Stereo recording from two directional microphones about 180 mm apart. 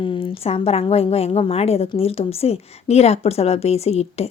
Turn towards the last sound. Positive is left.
turn(degrees=35)  # may be behind; listen again after turning